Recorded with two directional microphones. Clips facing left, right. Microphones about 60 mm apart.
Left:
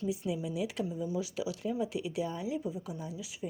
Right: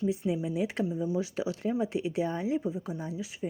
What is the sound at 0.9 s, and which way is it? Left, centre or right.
Speech, right.